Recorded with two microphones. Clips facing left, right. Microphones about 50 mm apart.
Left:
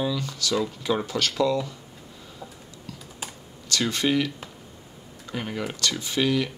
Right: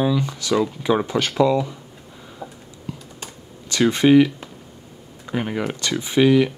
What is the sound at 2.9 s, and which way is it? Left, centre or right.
Computer keyboard, right.